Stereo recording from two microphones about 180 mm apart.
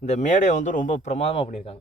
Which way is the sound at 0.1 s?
40° left (ahead or behind).